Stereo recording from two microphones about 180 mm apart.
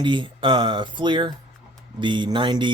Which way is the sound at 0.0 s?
25° right (ahead or behind).